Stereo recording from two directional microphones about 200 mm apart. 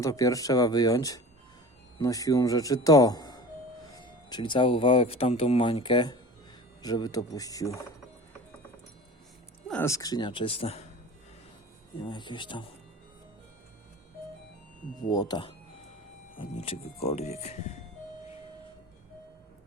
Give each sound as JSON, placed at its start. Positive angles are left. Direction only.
{"t": 0.0, "sound": "speech", "side_deg": 15}
{"t": 9.6, "sound": "speech", "side_deg": 10}
{"t": 12.0, "sound": "speech", "side_deg": 25}
{"t": 15.1, "sound": "speech", "side_deg": 20}